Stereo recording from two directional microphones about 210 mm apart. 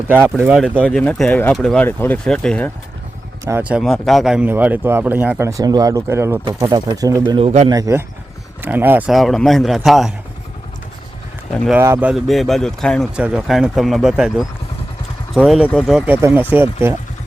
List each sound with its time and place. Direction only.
0.3 s speech: 10° right (ahead or behind)
0.6 s speech: centre (ahead or behind)
3.4 s speech: 10° right (ahead or behind)
11.5 s speech: centre (ahead or behind)
11.8 s speech: 10° right (ahead or behind)